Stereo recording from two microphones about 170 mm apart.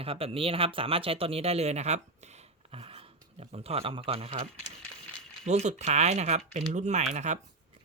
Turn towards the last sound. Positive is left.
turn(degrees=-40)  # may be behind; listen again after turning